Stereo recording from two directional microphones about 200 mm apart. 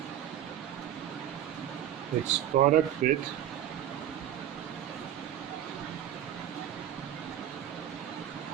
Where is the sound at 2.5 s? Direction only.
35° right (ahead or behind).